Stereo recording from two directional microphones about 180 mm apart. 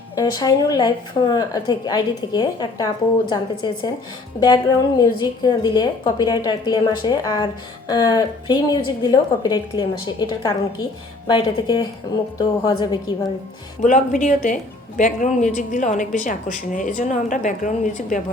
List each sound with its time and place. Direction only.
0.2 s a woman's voice: 20° left (ahead or behind)
4.4 s a woman's voice: 25° left (ahead or behind)
13.8 s a woman's voice: 45° left (ahead or behind)